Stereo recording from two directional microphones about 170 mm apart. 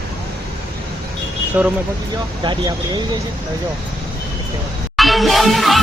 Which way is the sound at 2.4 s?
25° right (ahead or behind).